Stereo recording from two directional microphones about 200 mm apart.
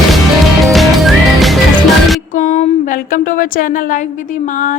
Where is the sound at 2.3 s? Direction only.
40° left (ahead or behind).